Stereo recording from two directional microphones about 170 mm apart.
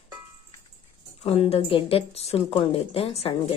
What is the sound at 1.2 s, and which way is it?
A woman's voice, 35° left (ahead or behind).